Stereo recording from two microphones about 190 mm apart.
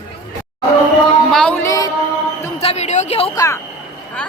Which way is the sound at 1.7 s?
20° left (ahead or behind).